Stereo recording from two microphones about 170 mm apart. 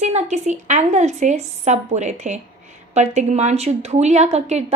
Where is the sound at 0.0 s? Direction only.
40° right (ahead or behind).